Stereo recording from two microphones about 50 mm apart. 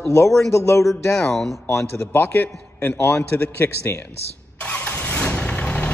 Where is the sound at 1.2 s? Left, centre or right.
Centre.